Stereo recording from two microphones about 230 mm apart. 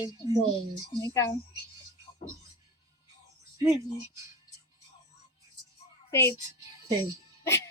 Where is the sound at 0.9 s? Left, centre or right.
Centre.